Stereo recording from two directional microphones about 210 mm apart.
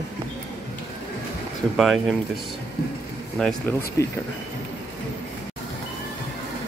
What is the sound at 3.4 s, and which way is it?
Speech, 5° left (ahead or behind).